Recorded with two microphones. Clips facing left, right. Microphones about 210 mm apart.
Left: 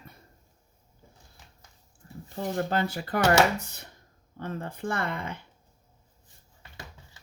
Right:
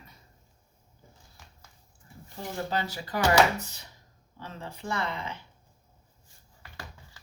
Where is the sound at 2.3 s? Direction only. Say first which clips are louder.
Left 4 dB; 55° left (ahead or behind).